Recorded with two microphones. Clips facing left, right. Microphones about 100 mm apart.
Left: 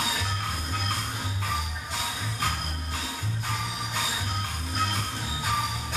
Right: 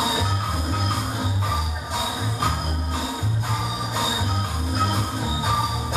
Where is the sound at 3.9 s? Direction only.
15° right (ahead or behind).